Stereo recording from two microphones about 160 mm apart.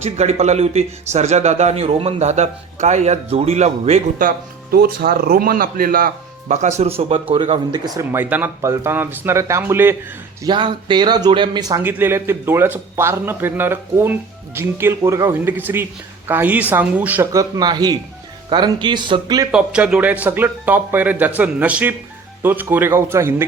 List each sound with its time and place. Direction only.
0.0 s speech: 45° right (ahead or behind)
4.2 s speech: 65° right (ahead or behind)
6.5 s speech: 45° right (ahead or behind)
7.9 s speech: 20° right (ahead or behind)
8.2 s speech: 10° right (ahead or behind)
10.4 s speech: 30° right (ahead or behind); by 17.2 s 10° right (ahead or behind)
17.3 s speech: 25° right (ahead or behind)
19.5 s speech: 5° right (ahead or behind)